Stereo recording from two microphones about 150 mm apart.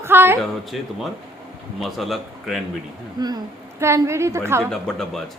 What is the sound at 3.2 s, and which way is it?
A woman's voice, 25° right (ahead or behind).